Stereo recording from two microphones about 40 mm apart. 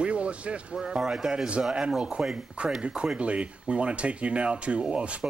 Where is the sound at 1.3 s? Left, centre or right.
Right.